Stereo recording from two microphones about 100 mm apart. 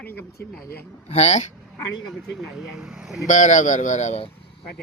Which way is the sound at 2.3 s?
5° right (ahead or behind).